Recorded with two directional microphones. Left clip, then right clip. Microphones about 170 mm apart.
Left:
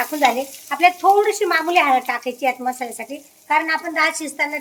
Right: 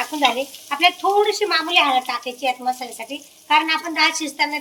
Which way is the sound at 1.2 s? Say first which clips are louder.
Left 1 dB; 40° left (ahead or behind).